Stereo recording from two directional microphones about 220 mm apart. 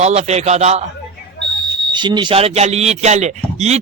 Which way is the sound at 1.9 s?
20° right (ahead or behind).